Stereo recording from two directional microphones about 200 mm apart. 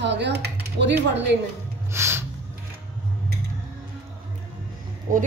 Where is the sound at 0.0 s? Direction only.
60° right (ahead or behind).